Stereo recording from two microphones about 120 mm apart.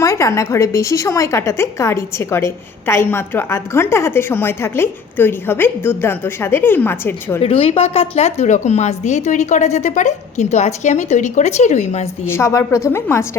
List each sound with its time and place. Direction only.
0.0 s a woman's voice: 25° left (ahead or behind)
7.4 s speech: 55° left (ahead or behind); by 12.0 s 75° left (ahead or behind)
12.2 s a woman's voice: 20° left (ahead or behind)